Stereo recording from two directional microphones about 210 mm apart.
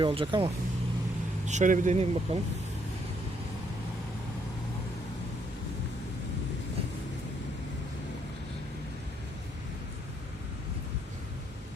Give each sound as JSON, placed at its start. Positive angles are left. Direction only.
{"t": 0.0, "sound": "speech", "side_deg": -25}
{"t": 1.5, "sound": "speech", "side_deg": -35}